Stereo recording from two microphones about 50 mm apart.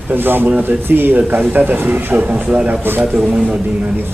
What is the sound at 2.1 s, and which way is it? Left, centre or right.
Speech, right.